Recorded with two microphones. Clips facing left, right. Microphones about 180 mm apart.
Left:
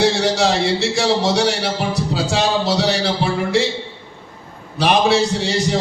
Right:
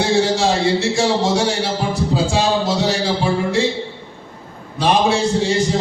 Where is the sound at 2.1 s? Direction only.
75° left (ahead or behind).